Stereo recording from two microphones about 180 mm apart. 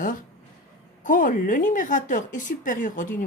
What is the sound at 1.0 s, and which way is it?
Speech, 50° left (ahead or behind).